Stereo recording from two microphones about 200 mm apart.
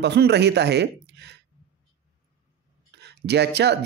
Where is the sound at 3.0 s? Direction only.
55° right (ahead or behind).